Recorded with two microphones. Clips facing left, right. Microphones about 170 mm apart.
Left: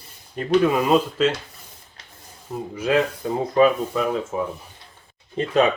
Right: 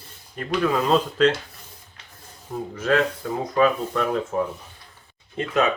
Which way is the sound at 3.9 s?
5° left (ahead or behind).